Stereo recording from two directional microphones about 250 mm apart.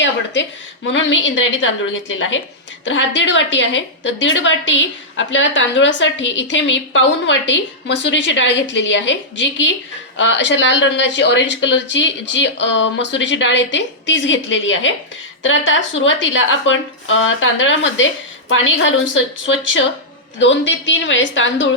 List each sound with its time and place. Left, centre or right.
0.9 s a woman's voice: left